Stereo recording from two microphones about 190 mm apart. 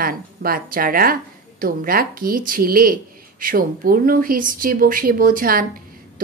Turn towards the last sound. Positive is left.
turn(degrees=-50)  # may be behind; listen again after turning